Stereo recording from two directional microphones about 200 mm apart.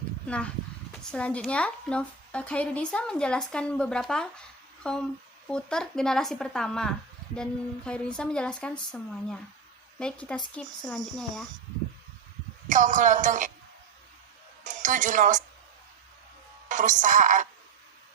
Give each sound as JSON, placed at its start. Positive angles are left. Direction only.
{"t": 0.3, "sound": "a woman's voice", "side_deg": 5}
{"t": 12.6, "sound": "speech", "side_deg": -40}
{"t": 14.6, "sound": "a woman's voice", "side_deg": -40}
{"t": 16.6, "sound": "speech", "side_deg": -40}